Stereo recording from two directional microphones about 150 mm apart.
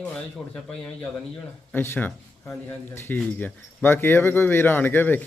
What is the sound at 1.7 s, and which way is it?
Speech, 15° left (ahead or behind).